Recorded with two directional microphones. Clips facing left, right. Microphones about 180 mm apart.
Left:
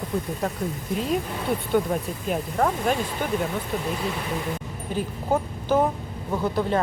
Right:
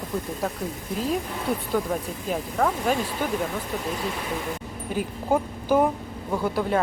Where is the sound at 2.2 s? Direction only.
Centre (ahead or behind).